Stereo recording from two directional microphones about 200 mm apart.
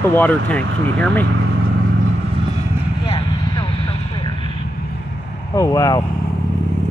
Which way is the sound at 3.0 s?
30° left (ahead or behind).